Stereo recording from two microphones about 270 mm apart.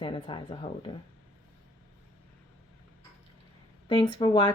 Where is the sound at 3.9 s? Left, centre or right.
Centre.